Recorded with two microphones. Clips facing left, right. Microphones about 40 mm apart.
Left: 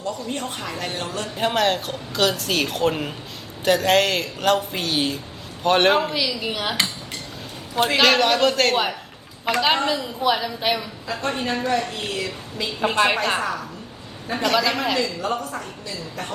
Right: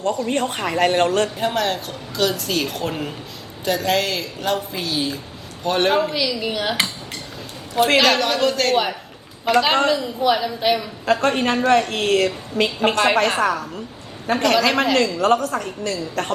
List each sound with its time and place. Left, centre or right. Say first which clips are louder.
0.0 s a woman's voice: right 7 dB; right
1.4 s a woman's voice: left 1 dB; left
6.1 s a woman's voice: right 2 dB; centre
8.0 s a woman's voice: left 1 dB; left
8.7 s a woman's voice: right 3 dB; centre
11.0 s a woman's voice: right 7 dB; right
14.3 s a woman's voice: right 6 dB; right
14.6 s a woman's voice: right 5 dB; right
14.9 s a woman's voice: right 7 dB; right